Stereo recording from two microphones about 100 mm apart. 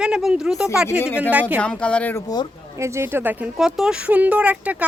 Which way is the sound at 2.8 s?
25° right (ahead or behind).